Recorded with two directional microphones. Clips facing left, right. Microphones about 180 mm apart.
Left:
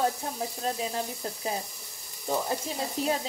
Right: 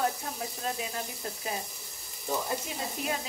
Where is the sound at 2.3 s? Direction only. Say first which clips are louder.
Left 3 dB; 30° left (ahead or behind).